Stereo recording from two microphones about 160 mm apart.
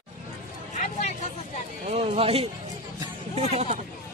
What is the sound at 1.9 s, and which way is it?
Speech, 40° right (ahead or behind).